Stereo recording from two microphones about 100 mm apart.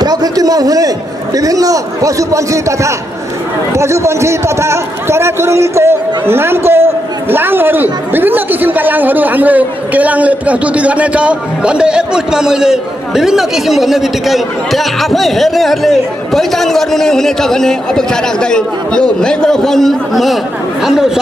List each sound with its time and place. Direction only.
0.0 s a man's voice: 40° right (ahead or behind); by 21.2 s 5° right (ahead or behind)